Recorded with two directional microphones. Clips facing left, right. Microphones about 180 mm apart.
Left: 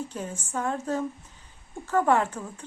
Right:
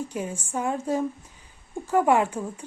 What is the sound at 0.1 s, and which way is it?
A woman's voice, 10° right (ahead or behind).